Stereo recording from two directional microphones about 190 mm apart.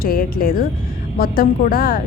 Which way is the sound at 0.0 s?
50° left (ahead or behind).